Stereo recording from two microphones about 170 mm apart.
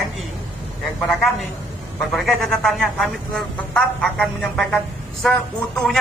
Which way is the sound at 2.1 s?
Centre (ahead or behind).